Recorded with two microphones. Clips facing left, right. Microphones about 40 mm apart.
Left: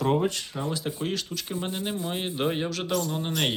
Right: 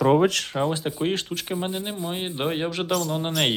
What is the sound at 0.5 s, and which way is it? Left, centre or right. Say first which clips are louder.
Speech: right 6 dB; right.